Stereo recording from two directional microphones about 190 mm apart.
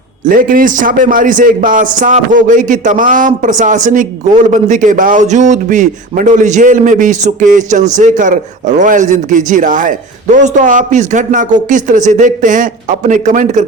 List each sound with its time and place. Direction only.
0.3 s a man's voice: 45° right (ahead or behind)